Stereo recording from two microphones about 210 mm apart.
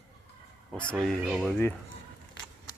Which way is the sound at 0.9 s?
Centre (ahead or behind).